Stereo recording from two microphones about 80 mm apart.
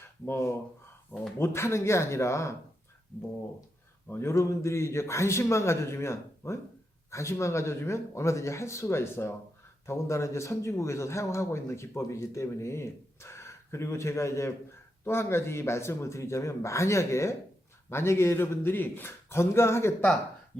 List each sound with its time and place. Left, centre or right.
1.4 s speech: left
4.1 s speech: left